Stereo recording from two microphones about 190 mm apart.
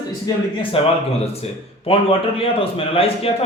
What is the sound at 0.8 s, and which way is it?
A man's voice, 30° left (ahead or behind).